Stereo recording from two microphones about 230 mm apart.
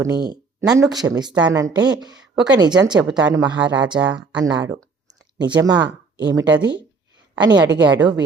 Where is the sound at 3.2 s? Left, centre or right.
Centre.